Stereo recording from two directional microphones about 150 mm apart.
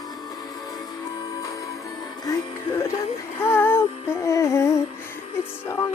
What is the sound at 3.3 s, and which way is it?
Music, 15° left (ahead or behind).